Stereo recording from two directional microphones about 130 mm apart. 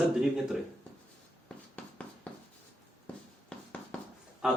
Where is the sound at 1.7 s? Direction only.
10° left (ahead or behind).